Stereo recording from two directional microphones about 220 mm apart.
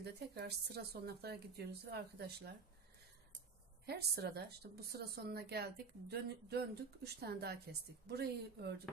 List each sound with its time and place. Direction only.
0.0 s a woman's voice: 50° right (ahead or behind)
3.8 s a woman's voice: 45° right (ahead or behind)